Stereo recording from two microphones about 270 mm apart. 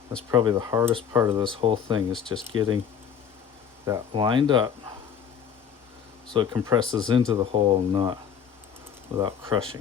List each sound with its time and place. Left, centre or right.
0.3 s speech: centre
3.8 s speech: centre
6.3 s speech: centre